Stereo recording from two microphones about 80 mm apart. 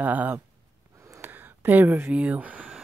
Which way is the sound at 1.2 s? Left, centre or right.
Right.